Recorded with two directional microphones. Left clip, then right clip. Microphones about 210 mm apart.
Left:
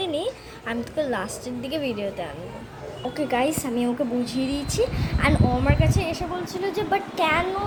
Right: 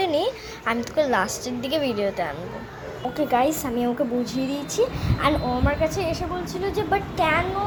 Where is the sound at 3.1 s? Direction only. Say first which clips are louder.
Right 3 dB; 5° left (ahead or behind).